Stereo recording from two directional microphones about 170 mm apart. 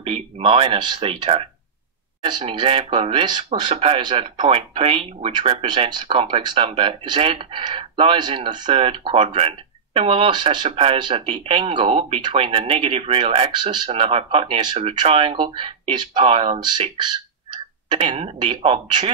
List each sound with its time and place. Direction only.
0.0 s speech: 35° right (ahead or behind)